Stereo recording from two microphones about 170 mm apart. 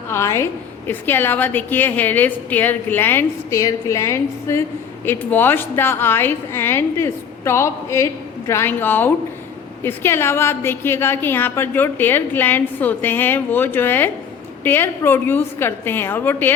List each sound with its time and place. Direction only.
0.1 s a woman's voice: 15° left (ahead or behind)